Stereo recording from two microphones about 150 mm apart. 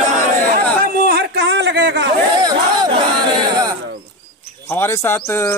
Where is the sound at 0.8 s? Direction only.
90° right.